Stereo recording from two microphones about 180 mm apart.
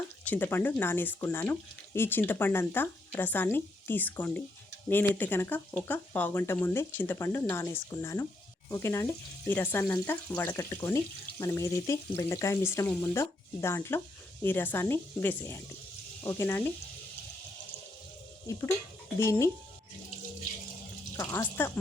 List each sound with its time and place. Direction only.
0.3 s speech: 10° left (ahead or behind)
19.2 s speech: 15° left (ahead or behind)
21.2 s speech: 15° left (ahead or behind)